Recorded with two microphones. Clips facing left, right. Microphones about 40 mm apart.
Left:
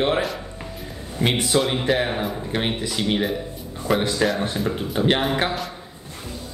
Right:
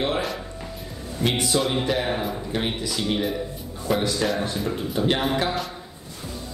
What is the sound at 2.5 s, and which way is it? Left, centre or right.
Speech, left.